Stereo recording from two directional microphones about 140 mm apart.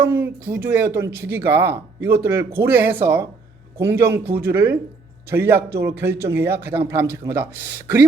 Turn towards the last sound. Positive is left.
turn(degrees=-15)  # may be behind; listen again after turning